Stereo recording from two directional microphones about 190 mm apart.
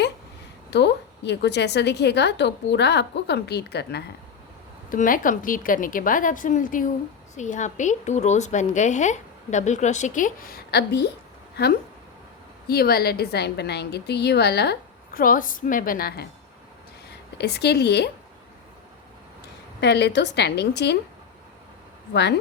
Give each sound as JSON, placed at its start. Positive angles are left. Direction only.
{"t": 0.7, "sound": "a woman's voice", "side_deg": 65}
{"t": 4.9, "sound": "a woman's voice", "side_deg": 45}
{"t": 17.3, "sound": "a woman's voice", "side_deg": 60}
{"t": 19.8, "sound": "a woman's voice", "side_deg": 65}
{"t": 22.1, "sound": "a woman's voice", "side_deg": 60}